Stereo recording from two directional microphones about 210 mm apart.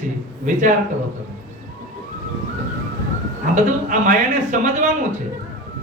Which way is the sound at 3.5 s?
40° right (ahead or behind).